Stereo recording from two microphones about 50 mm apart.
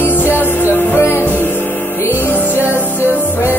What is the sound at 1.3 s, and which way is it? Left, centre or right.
Music, left.